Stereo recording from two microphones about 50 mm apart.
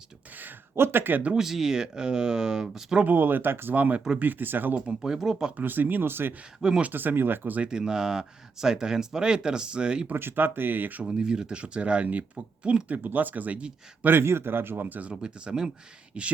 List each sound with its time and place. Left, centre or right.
0.8 s speech: right
1.4 s speech: centre
3.0 s speech: right
3.8 s speech: right
4.9 s speech: centre
5.5 s speech: right
6.6 s speech: centre
6.9 s speech: right
7.6 s speech: centre
10.1 s speech: right
11.0 s speech: centre
13.0 s speech: right
14.0 s speech: right
15.1 s speech: centre